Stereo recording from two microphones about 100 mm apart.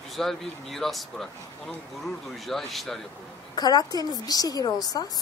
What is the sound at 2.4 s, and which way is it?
Speech, centre (ahead or behind).